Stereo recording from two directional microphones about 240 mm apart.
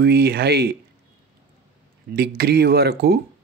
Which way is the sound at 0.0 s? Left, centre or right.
Right.